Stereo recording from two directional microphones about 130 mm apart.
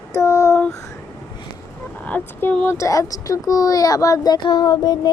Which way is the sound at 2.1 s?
10° left (ahead or behind).